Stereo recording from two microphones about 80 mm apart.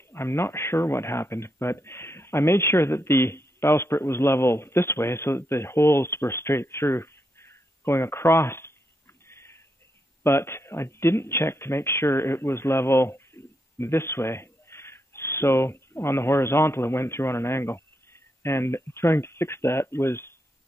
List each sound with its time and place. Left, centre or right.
0.1 s speech: left
9.3 s a sound: left
10.2 s speech: left